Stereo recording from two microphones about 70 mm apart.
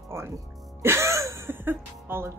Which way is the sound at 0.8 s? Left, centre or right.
Right.